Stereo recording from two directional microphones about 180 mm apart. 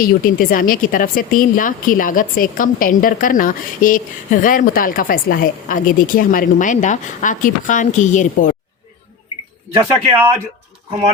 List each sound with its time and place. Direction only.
0.0 s speech: 50° left (ahead or behind)
9.7 s speech: 15° right (ahead or behind)